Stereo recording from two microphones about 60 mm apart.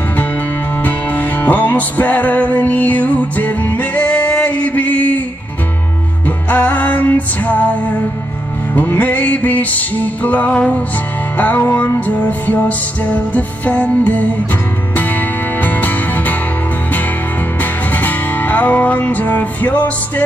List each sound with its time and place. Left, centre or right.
0.8 s music: left
6.2 s music: left
17.6 s music: left